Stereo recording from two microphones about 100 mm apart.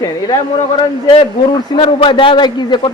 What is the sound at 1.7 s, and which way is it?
A man's voice, 65° left (ahead or behind).